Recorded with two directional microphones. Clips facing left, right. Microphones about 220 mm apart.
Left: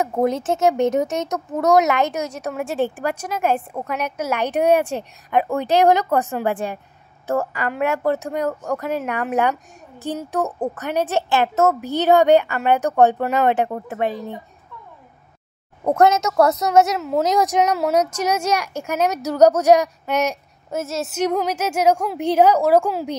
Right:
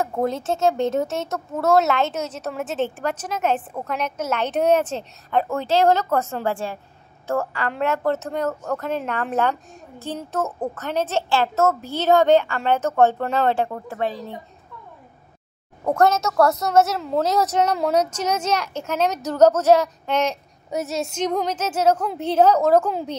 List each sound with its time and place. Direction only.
0.0 s speech: 15° left (ahead or behind)
15.8 s speech: 20° left (ahead or behind)